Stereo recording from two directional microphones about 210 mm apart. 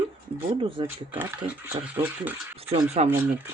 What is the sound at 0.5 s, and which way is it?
Speech, 25° right (ahead or behind).